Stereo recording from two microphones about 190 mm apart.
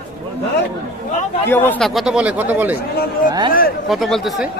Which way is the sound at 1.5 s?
5° left (ahead or behind).